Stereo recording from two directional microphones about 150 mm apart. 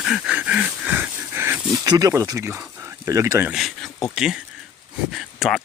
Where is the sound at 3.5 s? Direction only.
Centre (ahead or behind).